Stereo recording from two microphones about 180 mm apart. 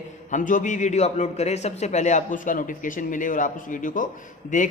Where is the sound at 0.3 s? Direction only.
45° left (ahead or behind).